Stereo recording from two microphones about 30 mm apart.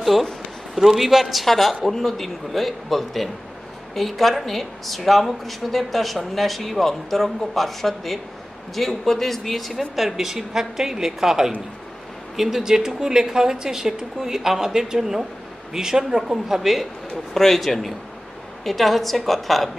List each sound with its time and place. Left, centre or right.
0.0 s a woman's voice: centre
17.3 s speech: centre